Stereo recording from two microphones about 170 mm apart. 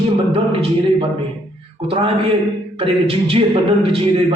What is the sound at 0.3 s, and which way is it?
Speech, 30° right (ahead or behind).